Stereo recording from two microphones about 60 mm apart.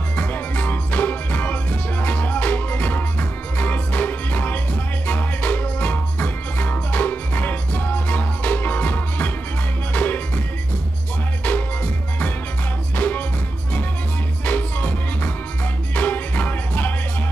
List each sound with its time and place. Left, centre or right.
0.1 s music: left
12.9 s music: left
14.4 s music: left